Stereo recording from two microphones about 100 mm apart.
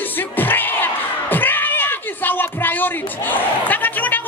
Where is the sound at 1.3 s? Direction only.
20° left (ahead or behind).